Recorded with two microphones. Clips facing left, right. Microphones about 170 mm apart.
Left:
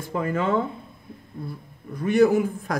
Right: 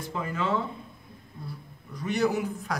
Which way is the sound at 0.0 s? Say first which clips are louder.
Left 6 dB; 50° left (ahead or behind).